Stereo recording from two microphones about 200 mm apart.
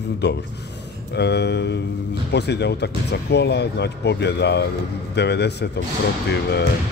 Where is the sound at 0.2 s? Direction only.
60° left (ahead or behind).